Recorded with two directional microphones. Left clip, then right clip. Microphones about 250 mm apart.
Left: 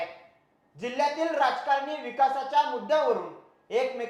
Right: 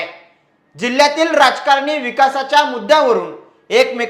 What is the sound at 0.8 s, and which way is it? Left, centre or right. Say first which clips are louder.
A woman's voice: right 14 dB; right.